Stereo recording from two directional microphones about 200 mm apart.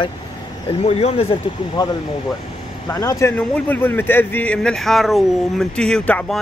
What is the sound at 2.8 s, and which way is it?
Speech, 15° left (ahead or behind).